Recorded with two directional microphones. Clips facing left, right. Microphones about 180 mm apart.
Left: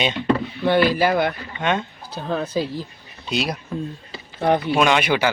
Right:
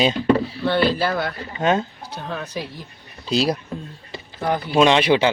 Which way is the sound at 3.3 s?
30° right (ahead or behind).